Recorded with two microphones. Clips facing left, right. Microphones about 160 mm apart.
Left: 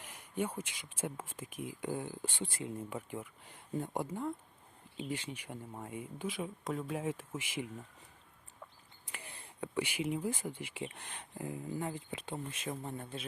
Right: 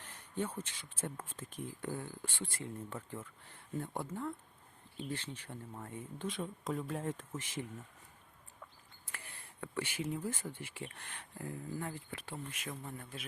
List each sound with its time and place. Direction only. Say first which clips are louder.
0.0 s speech: left 2 dB; 10° left (ahead or behind)
9.1 s speech: left 3 dB; 20° left (ahead or behind)